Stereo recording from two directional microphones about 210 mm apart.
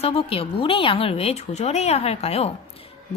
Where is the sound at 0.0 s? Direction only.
25° left (ahead or behind).